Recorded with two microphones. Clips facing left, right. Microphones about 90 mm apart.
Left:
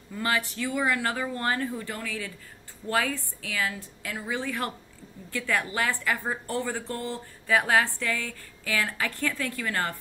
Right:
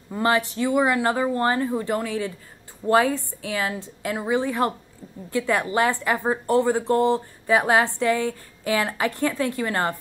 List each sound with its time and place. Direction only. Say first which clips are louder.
0.1 s a woman's voice: right 7 dB; 25° right (ahead or behind)
4.0 s a woman's voice: right 9 dB; 40° right (ahead or behind)
4.3 s a woman's voice: right 8 dB; 20° right (ahead or behind)
6.8 s speech: right 14 dB; 65° right (ahead or behind)
7.4 s a woman's voice: right 4 dB; 20° right (ahead or behind)